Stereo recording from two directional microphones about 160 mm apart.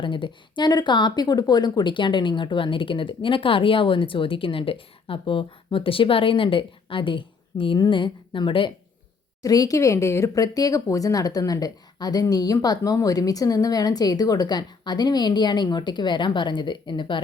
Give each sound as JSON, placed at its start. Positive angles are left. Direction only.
{"t": 0.0, "sound": "speech", "side_deg": 30}